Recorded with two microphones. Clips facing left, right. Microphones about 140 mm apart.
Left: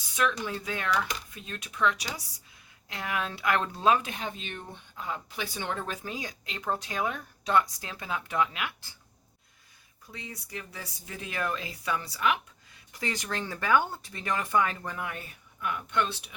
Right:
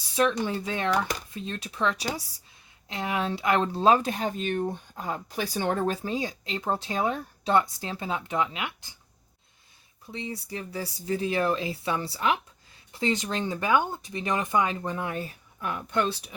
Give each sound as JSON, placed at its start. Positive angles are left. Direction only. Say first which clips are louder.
{"t": 0.2, "sound": "speech", "louder": "right 5 dB", "side_deg": -30}
{"t": 10.1, "sound": "speech", "louder": "right 7 dB", "side_deg": -25}